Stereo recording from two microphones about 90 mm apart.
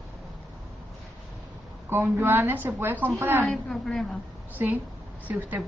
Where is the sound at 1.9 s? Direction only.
25° right (ahead or behind).